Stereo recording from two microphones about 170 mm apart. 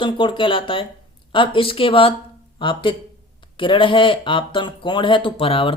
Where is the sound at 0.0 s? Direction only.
30° left (ahead or behind).